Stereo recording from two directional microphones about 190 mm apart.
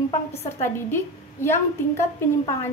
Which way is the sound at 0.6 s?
15° left (ahead or behind).